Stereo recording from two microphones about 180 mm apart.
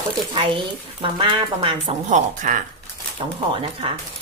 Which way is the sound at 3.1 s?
30° right (ahead or behind).